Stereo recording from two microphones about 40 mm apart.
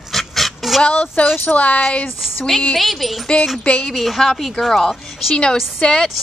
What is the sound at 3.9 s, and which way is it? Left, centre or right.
A woman's voice, centre.